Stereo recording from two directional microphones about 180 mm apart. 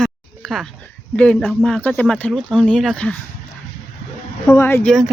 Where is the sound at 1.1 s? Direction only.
5° left (ahead or behind).